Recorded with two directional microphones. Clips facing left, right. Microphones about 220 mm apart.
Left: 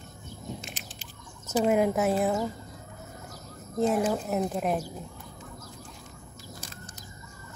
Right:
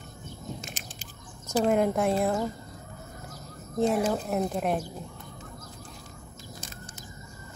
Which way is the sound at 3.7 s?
Centre (ahead or behind).